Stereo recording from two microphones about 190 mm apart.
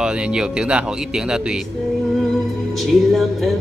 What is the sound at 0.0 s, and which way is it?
Music, 5° right (ahead or behind).